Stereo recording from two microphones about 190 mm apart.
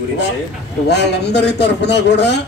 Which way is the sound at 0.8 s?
60° left (ahead or behind).